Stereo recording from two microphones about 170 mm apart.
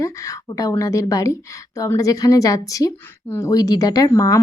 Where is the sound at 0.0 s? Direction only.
20° left (ahead or behind).